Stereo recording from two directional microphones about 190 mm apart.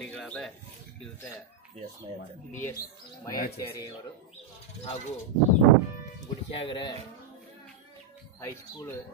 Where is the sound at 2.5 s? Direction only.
10° left (ahead or behind).